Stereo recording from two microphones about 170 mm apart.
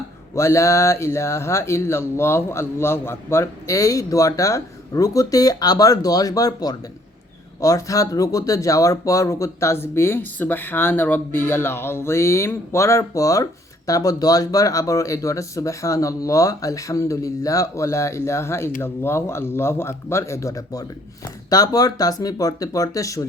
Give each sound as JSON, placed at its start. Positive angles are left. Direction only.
{"t": 0.3, "sound": "speech", "side_deg": 15}